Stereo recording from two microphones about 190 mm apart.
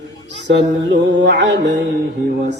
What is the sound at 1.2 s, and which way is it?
Mantra, 65° right (ahead or behind).